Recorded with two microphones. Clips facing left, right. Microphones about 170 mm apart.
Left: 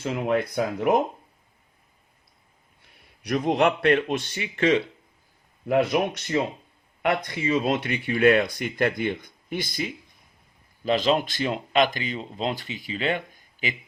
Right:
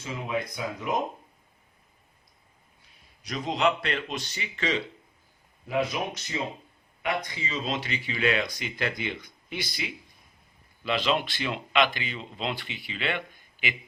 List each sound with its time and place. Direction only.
0.0 s speech: 65° left (ahead or behind)
2.8 s a man's voice: 65° left (ahead or behind); by 13.7 s 40° left (ahead or behind)